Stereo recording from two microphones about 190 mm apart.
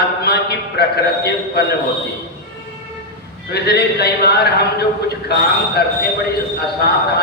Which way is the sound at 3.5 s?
55° left (ahead or behind).